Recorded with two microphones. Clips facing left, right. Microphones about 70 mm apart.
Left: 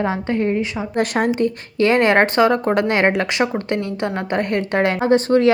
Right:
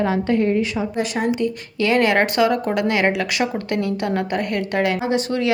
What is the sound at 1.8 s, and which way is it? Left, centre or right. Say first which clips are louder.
A woman's voice: left 3 dB; left.